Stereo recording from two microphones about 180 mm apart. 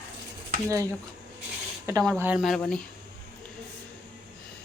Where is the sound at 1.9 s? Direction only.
20° right (ahead or behind); by 2.8 s centre (ahead or behind).